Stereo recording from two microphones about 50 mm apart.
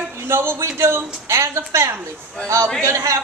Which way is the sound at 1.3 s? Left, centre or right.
Right.